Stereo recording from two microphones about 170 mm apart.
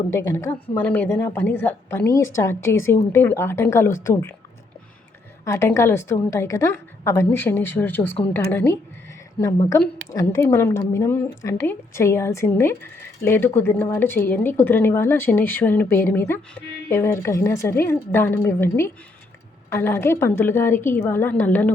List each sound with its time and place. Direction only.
0.0 s a woman's voice: 20° left (ahead or behind)
5.5 s a woman's voice: 15° left (ahead or behind)